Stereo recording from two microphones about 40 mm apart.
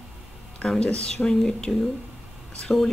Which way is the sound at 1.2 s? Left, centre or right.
Centre.